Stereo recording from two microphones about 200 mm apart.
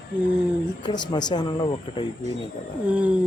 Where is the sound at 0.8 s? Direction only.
20° left (ahead or behind).